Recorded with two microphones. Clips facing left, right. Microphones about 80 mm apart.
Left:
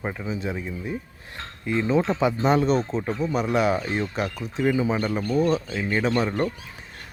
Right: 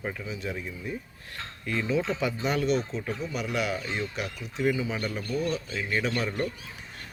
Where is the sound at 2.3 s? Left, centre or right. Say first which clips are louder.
Left 5 dB; left.